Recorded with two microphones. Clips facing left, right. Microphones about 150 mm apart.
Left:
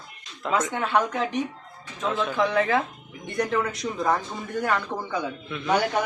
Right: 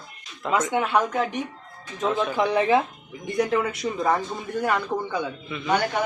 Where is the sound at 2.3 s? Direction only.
15° right (ahead or behind).